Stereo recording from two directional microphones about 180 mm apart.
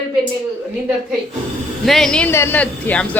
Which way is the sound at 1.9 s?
Centre (ahead or behind).